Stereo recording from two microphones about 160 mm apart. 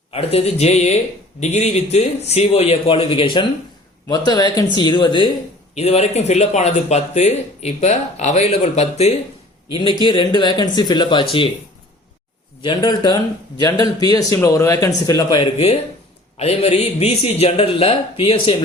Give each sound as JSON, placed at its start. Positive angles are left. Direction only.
{"t": 0.1, "sound": "a man's voice", "side_deg": 40}
{"t": 5.7, "sound": "speech", "side_deg": 40}
{"t": 10.0, "sound": "speech", "side_deg": 30}
{"t": 12.6, "sound": "speech", "side_deg": 25}
{"t": 15.5, "sound": "a man's voice", "side_deg": 40}